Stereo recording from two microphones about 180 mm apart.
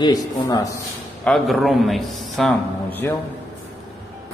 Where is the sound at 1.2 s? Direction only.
Centre (ahead or behind).